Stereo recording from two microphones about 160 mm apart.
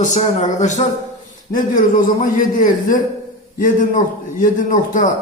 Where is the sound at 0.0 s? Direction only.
50° left (ahead or behind).